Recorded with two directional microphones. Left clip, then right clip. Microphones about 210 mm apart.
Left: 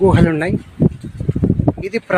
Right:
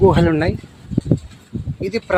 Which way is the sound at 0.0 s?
10° right (ahead or behind).